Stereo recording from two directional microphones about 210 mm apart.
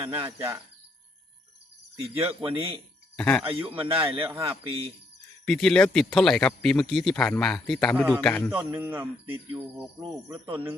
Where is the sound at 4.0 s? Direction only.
15° right (ahead or behind).